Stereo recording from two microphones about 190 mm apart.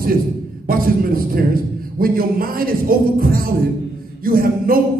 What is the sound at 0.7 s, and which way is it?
Speech, 50° right (ahead or behind).